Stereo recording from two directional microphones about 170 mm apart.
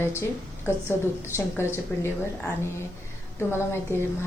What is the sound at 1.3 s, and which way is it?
Speech, 15° left (ahead or behind).